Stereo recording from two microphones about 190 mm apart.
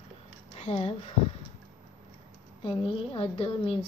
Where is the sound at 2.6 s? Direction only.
30° left (ahead or behind).